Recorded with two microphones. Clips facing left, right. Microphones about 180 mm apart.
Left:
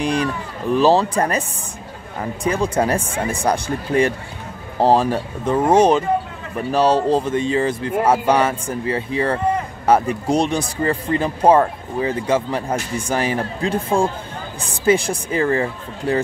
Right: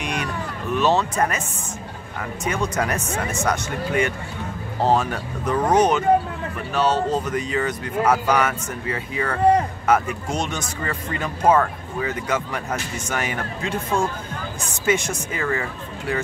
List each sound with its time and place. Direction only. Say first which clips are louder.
0.0 s speech: left 6 dB; 30° left (ahead or behind)
2.4 s speech: left 5 dB; 30° left (ahead or behind)